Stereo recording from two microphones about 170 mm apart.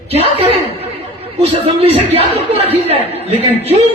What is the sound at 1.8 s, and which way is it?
A man's voice, 35° right (ahead or behind).